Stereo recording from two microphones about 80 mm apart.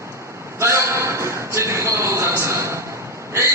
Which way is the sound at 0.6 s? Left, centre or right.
Right.